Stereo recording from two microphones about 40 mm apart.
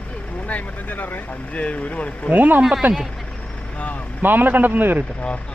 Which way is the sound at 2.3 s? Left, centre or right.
Right.